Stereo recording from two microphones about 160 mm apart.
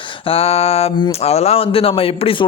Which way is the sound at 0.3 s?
40° left (ahead or behind).